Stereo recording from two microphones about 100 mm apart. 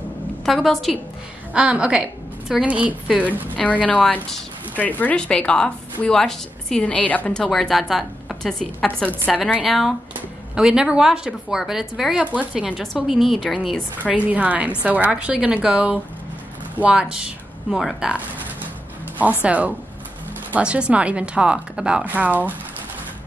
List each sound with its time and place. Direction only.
0.5 s a woman's voice: centre (ahead or behind)
1.5 s a woman's voice: 10° right (ahead or behind)
3.5 s speech: 15° left (ahead or behind)
7.3 s a woman's voice: 5° left (ahead or behind)
8.8 s speech: 15° left (ahead or behind)
9.5 s a woman's voice: 5° right (ahead or behind)
14.1 s a woman's voice: 15° right (ahead or behind)
19.1 s a woman's voice: 15° right (ahead or behind)